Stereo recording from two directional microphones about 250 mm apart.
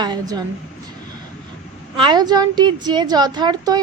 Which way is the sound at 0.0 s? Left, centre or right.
Centre.